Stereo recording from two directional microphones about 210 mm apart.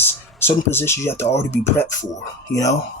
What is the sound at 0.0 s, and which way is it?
Speech, 10° left (ahead or behind).